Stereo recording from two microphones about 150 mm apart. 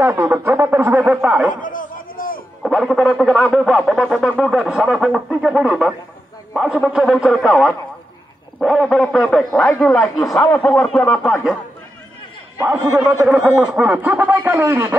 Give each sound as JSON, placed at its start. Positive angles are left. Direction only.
{"t": 0.0, "sound": "speech", "side_deg": -15}
{"t": 1.5, "sound": "a sound", "side_deg": 60}
{"t": 2.6, "sound": "speech", "side_deg": 0}
{"t": 8.5, "sound": "speech", "side_deg": 0}
{"t": 12.5, "sound": "a man's voice", "side_deg": -15}